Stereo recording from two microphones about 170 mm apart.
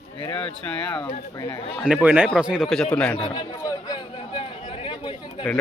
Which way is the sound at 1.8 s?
10° right (ahead or behind).